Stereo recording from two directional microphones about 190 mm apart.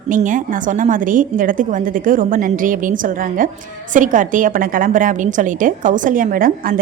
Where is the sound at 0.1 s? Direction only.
45° right (ahead or behind).